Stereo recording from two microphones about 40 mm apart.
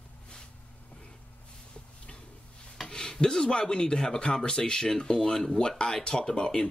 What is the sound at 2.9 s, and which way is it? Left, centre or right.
Speech, centre.